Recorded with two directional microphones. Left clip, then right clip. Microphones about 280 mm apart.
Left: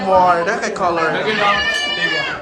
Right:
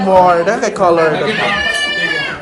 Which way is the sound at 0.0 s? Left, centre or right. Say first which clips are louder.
Right 4 dB; centre.